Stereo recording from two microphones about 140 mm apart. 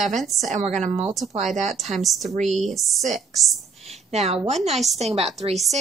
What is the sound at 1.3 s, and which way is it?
Speech, 55° right (ahead or behind).